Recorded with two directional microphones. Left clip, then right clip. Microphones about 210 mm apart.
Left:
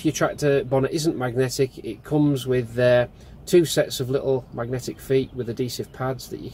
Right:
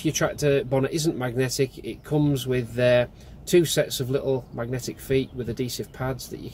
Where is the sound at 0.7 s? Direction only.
5° left (ahead or behind).